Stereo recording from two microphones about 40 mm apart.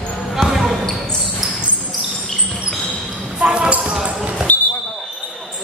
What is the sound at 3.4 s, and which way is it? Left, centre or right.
Basketball bounce, right.